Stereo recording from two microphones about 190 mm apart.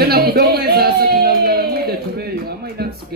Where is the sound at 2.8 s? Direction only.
55° right (ahead or behind).